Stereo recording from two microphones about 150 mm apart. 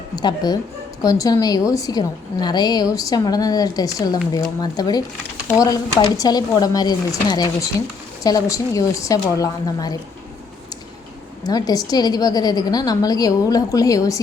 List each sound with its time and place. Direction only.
0.2 s a woman's voice: 25° left (ahead or behind)
11.4 s a woman's voice: 25° left (ahead or behind)